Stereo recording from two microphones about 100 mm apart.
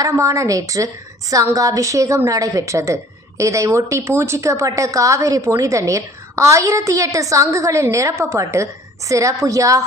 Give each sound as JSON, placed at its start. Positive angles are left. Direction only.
{"t": 0.0, "sound": "a woman's voice", "side_deg": -35}